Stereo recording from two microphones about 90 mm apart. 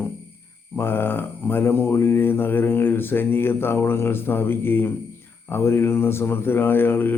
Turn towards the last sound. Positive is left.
turn(degrees=25)  # may be behind; listen again after turning